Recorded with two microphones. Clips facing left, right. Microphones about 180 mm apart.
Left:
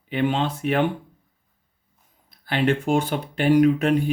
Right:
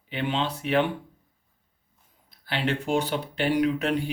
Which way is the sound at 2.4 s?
50° left (ahead or behind).